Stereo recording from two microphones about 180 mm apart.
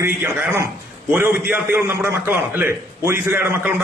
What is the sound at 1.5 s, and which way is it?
A man's voice, 10° right (ahead or behind).